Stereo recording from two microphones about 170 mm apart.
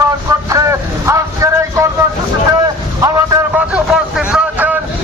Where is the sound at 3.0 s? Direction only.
20° right (ahead or behind).